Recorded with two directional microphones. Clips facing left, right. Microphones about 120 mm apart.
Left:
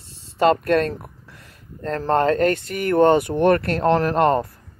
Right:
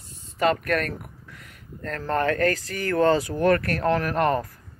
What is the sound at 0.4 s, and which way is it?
Speech, 30° left (ahead or behind).